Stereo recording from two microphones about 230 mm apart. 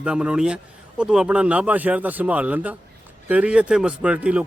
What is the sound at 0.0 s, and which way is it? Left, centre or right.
Speech, centre.